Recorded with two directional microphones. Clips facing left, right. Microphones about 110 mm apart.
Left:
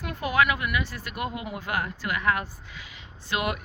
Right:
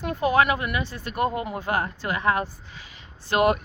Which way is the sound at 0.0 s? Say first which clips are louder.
Right 4 dB; 30° right (ahead or behind).